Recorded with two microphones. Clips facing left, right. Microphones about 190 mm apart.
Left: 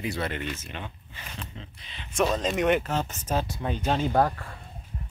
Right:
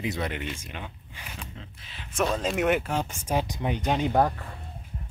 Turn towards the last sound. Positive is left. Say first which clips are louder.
# even
turn(degrees=-5)  # may be behind; listen again after turning